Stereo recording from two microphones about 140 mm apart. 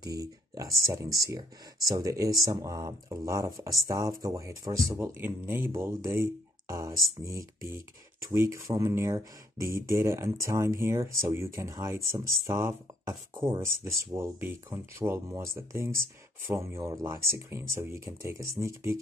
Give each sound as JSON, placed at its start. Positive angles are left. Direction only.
{"t": 0.0, "sound": "speech", "side_deg": -25}